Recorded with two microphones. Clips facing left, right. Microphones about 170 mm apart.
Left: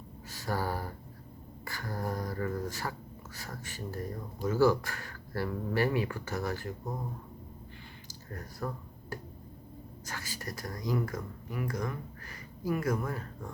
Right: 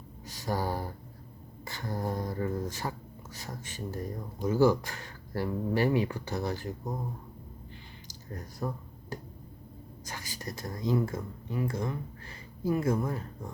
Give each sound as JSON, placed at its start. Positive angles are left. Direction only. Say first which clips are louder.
{"t": 0.3, "sound": "speech", "louder": "right 2 dB", "side_deg": -15}
{"t": 8.0, "sound": "a sound", "louder": "right 2 dB", "side_deg": -20}
{"t": 10.1, "sound": "speech", "louder": "right 1 dB", "side_deg": -15}